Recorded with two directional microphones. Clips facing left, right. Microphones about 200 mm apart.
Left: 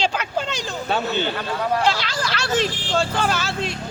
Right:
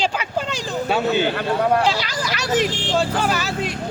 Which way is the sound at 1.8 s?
10° right (ahead or behind).